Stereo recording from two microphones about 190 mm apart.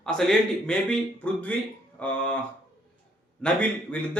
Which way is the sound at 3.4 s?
5° left (ahead or behind).